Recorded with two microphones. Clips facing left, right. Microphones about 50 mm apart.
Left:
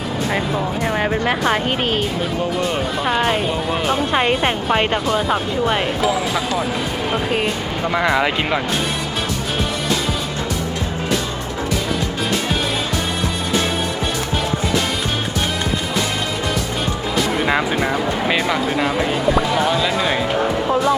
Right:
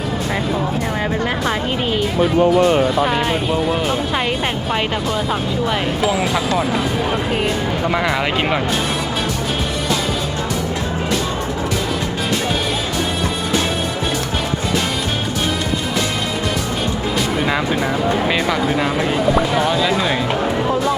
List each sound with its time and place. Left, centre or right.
0.9 s speech: centre
3.0 s speech: centre
6.0 s speech: centre
7.9 s speech: centre
8.4 s speech: centre
17.4 s speech: centre